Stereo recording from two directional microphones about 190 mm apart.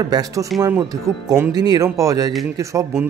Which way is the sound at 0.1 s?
20° right (ahead or behind).